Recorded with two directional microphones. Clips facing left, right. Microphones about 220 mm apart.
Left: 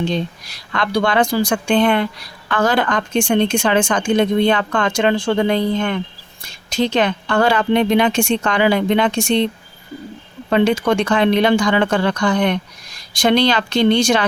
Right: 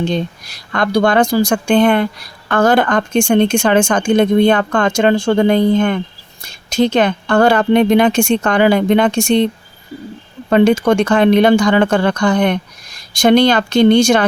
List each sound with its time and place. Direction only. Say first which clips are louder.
0.1 s speech: right 3 dB; 45° right (ahead or behind)
10.5 s speech: right 4 dB; 50° right (ahead or behind)